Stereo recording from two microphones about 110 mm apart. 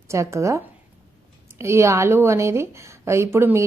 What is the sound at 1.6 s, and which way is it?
A woman's voice, 25° right (ahead or behind).